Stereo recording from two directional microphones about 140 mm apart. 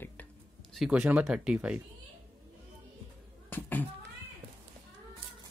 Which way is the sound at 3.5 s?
15° left (ahead or behind).